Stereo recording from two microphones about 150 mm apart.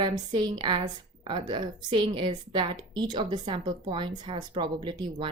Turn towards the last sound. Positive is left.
turn(degrees=-35)  # may be behind; listen again after turning